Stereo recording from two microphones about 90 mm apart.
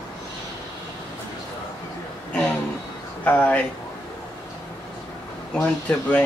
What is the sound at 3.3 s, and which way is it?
Speech, 15° left (ahead or behind).